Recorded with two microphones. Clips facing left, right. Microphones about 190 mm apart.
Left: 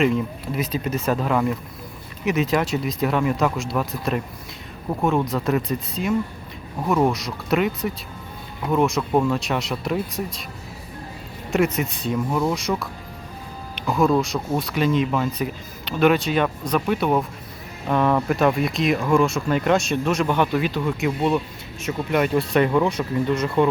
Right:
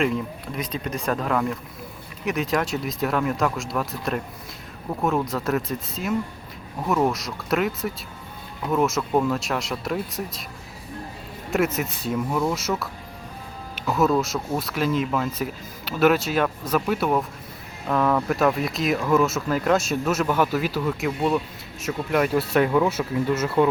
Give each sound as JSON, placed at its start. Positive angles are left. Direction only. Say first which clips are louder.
{"t": 0.0, "sound": "speech", "louder": "left 3 dB", "side_deg": 0}
{"t": 11.5, "sound": "speech", "louder": "left 2 dB", "side_deg": 0}
{"t": 13.7, "sound": "speech", "louder": "left 2 dB", "side_deg": -5}